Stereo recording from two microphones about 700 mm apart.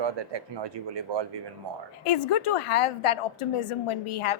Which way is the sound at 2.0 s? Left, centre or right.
Left.